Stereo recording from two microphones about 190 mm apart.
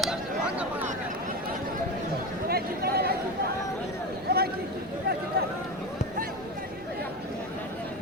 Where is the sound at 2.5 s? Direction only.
55° right (ahead or behind).